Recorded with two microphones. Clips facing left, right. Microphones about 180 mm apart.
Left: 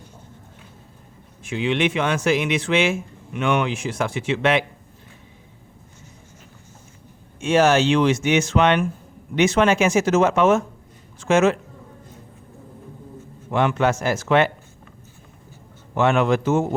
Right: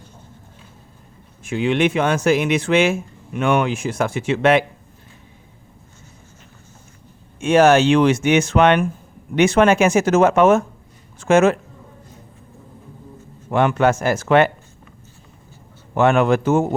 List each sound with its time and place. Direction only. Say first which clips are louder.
1.5 s speech: right 3 dB; 45° right (ahead or behind)
7.3 s speech: right 4 dB; 55° right (ahead or behind)
13.5 s speech: right 3 dB; 50° right (ahead or behind)
16.0 s speech: right 3 dB; 50° right (ahead or behind)